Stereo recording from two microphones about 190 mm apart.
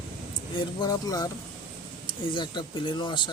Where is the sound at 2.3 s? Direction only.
25° left (ahead or behind).